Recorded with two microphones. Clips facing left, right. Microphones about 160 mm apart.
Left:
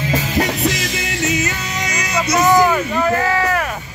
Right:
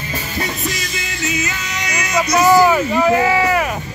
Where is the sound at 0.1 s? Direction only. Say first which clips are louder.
Left 5 dB; 85° left.